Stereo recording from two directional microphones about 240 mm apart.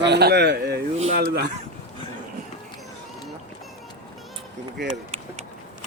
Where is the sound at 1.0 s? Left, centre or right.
Right.